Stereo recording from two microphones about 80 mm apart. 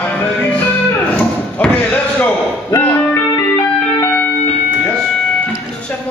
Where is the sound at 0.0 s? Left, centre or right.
Left.